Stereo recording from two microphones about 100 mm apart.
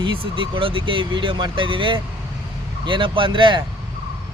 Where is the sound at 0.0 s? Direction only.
55° right (ahead or behind).